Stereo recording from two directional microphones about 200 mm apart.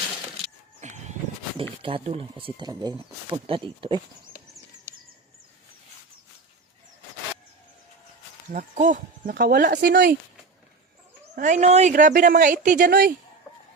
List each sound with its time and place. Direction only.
0.8 s a sound: 35° right (ahead or behind)
1.8 s speech: 30° right (ahead or behind)
8.5 s speech: 40° right (ahead or behind); by 10.2 s 60° right (ahead or behind)
11.3 s speech: 35° right (ahead or behind)